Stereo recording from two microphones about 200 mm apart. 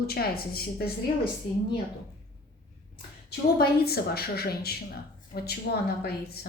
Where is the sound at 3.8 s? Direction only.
50° left (ahead or behind).